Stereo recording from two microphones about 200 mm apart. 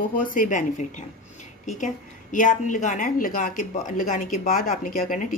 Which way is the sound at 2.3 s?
40° left (ahead or behind).